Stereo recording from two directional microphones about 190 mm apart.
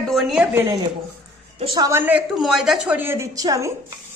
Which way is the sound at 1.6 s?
30° right (ahead or behind).